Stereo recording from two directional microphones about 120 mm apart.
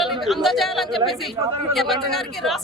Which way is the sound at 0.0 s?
Centre (ahead or behind).